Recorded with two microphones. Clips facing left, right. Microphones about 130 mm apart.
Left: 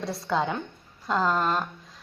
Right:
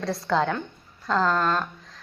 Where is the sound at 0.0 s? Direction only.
5° left (ahead or behind).